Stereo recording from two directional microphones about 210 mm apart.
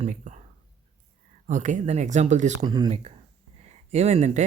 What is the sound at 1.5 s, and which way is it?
Speech, 35° right (ahead or behind).